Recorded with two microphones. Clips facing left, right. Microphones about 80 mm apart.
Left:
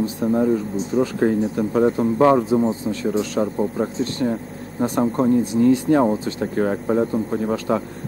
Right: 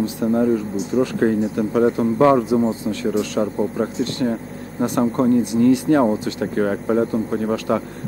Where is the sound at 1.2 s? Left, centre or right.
Right.